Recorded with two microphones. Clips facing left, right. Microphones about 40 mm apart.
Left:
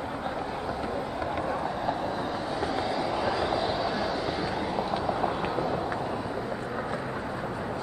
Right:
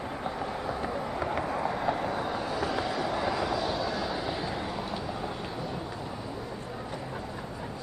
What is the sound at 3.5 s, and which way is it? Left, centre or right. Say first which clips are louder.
Train: left 2 dB; left.